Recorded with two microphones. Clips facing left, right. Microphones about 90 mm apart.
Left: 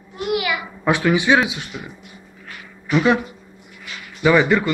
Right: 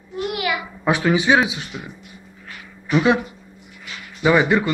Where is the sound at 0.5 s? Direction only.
20° right (ahead or behind).